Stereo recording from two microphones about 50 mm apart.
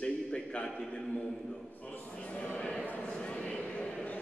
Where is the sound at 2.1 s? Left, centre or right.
Left.